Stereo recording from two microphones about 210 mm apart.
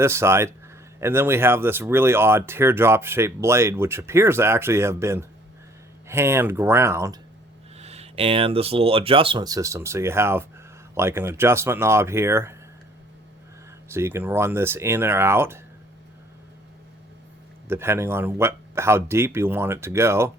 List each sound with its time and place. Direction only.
0.0 s speech: 10° right (ahead or behind)
7.8 s speech: 30° right (ahead or behind); by 12.5 s 10° right (ahead or behind)
13.8 s speech: 10° right (ahead or behind)
17.7 s speech: 10° right (ahead or behind)